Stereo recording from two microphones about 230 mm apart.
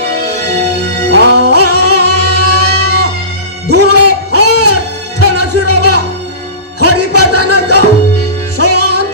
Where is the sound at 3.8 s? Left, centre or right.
Right.